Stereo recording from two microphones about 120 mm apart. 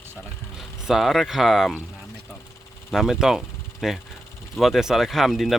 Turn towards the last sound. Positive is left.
turn(degrees=0)  # may be behind; listen again after turning